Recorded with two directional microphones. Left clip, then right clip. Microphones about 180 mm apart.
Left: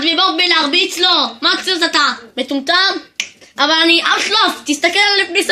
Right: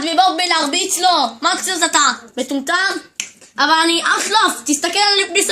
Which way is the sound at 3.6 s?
20° right (ahead or behind).